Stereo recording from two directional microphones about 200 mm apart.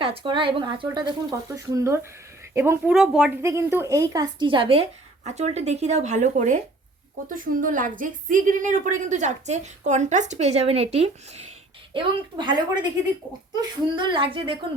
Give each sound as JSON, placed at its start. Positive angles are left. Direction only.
{"t": 0.0, "sound": "a woman's voice", "side_deg": -25}